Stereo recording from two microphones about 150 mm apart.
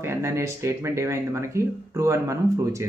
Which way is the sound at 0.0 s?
15° right (ahead or behind).